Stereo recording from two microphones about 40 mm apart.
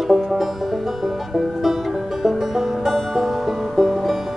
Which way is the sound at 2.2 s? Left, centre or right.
Centre.